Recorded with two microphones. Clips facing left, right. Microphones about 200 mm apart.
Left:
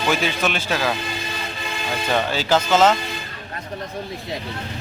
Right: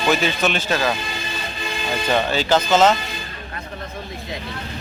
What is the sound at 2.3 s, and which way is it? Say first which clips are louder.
Speech: right 1 dB; 10° left (ahead or behind).